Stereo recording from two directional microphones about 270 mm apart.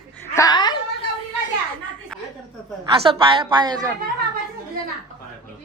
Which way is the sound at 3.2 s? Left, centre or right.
Centre.